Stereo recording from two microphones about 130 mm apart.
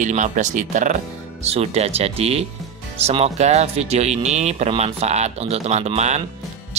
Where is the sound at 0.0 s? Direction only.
70° right (ahead or behind).